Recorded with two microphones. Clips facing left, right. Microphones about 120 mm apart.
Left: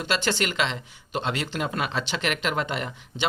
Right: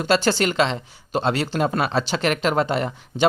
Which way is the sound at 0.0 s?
40° right (ahead or behind).